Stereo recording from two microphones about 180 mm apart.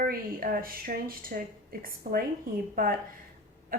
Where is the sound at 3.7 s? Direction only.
55° right (ahead or behind).